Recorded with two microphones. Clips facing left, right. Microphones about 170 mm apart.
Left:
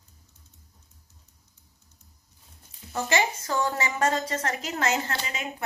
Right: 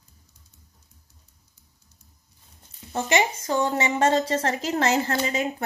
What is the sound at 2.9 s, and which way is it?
A woman's voice, 20° right (ahead or behind).